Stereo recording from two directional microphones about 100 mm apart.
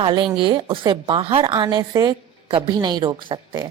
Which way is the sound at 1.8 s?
40° right (ahead or behind).